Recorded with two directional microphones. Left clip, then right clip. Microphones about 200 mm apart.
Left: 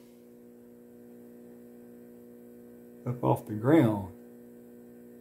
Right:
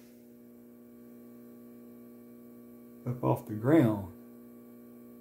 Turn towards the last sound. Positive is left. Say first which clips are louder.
# left 2 dB
turn(degrees=10)  # may be behind; listen again after turning